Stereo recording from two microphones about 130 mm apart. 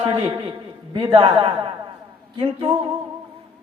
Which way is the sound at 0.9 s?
35° right (ahead or behind).